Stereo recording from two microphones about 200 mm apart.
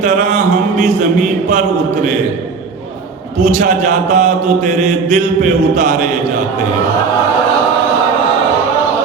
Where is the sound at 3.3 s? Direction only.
35° right (ahead or behind).